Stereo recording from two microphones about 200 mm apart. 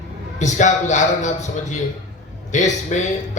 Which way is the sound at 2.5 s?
35° left (ahead or behind).